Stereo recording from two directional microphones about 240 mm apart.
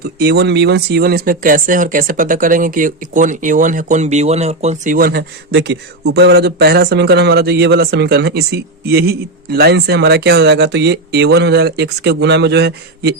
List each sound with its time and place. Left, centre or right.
0.2 s speech: right